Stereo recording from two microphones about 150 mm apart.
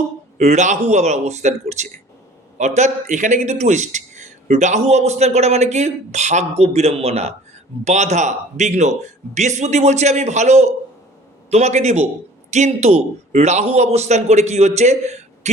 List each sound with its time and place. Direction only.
0.3 s a man's voice: 50° right (ahead or behind)